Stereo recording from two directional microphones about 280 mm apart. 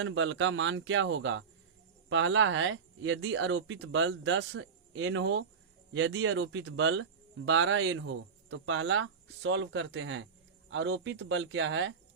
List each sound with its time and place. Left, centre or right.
0.0 s speech: right